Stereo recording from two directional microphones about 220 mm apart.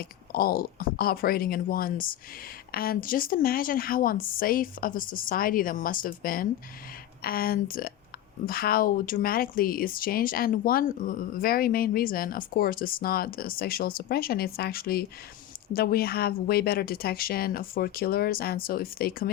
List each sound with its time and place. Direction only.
0.0 s a woman's voice: 45° left (ahead or behind)